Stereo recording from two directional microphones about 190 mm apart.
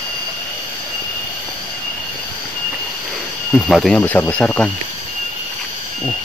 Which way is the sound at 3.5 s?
Centre (ahead or behind).